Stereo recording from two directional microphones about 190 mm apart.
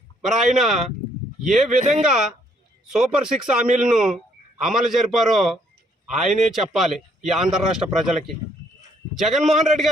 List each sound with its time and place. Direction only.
0.3 s a man's voice: centre (ahead or behind)